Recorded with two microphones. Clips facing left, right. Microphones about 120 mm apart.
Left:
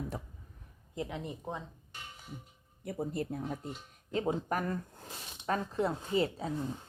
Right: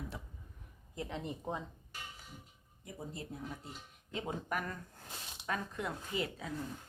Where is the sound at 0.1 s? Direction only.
40° left (ahead or behind).